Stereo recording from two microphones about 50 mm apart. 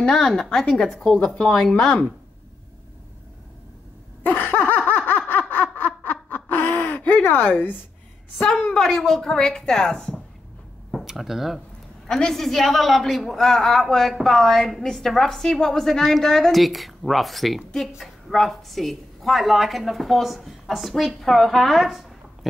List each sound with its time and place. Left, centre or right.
0.0 s speech: centre
4.2 s laughter: left
5.5 s snicker: left
7.1 s speech: left
8.6 s speech: centre
11.1 s a woman's voice: centre
12.1 s a woman's voice: centre